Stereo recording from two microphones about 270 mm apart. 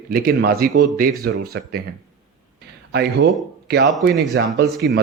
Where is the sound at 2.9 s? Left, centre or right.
Right.